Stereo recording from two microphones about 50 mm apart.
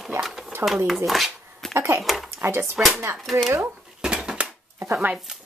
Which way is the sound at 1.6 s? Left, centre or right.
Centre.